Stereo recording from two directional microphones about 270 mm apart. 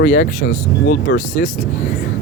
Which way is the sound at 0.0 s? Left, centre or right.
Left.